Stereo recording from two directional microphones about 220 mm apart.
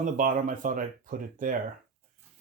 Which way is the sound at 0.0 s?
35° right (ahead or behind).